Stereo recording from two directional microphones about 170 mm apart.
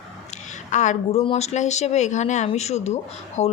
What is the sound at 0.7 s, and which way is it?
Speech, 45° left (ahead or behind).